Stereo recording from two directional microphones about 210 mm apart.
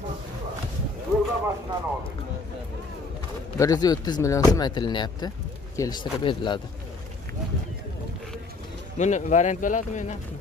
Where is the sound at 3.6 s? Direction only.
20° left (ahead or behind).